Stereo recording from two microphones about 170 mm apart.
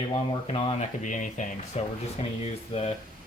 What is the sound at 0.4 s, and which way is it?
Speech, 35° left (ahead or behind).